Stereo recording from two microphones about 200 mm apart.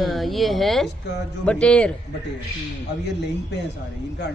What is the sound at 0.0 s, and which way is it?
Speech, centre (ahead or behind).